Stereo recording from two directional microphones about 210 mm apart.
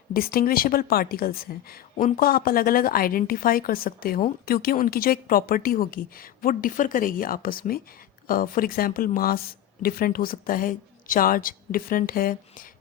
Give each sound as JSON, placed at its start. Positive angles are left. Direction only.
{"t": 0.1, "sound": "a woman's voice", "side_deg": 45}